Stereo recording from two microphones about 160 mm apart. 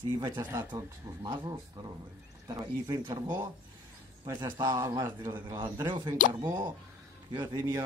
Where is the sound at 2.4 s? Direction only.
20° right (ahead or behind).